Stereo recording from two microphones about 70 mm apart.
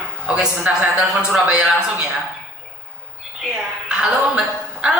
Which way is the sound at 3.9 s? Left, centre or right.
Centre.